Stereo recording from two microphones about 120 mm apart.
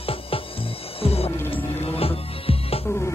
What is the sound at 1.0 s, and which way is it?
Music, 55° left (ahead or behind).